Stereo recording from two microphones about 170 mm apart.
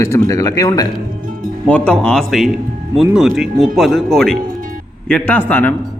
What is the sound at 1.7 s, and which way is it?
Speech, 5° left (ahead or behind).